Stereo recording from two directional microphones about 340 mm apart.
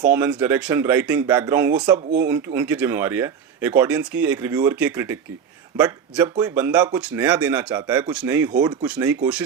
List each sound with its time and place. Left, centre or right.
0.1 s speech: centre